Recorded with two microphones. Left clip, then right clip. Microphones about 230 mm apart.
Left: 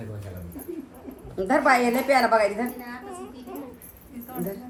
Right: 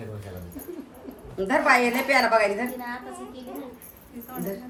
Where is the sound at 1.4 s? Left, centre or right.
Centre.